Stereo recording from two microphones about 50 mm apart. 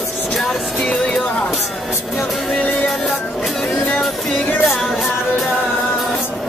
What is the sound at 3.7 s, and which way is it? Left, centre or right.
Music, centre.